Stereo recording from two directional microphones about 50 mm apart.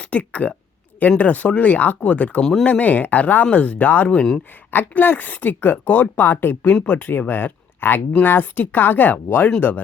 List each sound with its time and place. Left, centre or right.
0.0 s speech: left
2.4 s speech: centre
2.6 s speech: left
4.7 s speech: left
6.8 s speech: left